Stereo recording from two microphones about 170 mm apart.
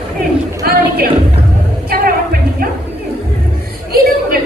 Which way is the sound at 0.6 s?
60° right (ahead or behind).